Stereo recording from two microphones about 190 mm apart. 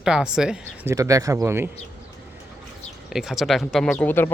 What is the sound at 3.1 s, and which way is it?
Speech, centre (ahead or behind).